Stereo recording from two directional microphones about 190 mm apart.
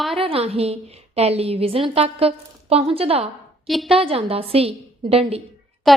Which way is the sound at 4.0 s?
30° right (ahead or behind).